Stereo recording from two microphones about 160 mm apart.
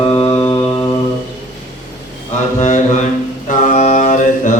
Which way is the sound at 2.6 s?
50° left (ahead or behind).